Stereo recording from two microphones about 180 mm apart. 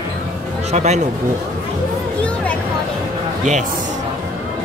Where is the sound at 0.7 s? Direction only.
40° right (ahead or behind).